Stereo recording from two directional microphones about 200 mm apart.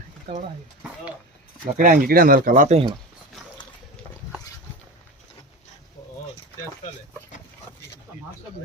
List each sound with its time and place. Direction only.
0.3 s speech: 30° right (ahead or behind)
1.6 s speech: 40° right (ahead or behind)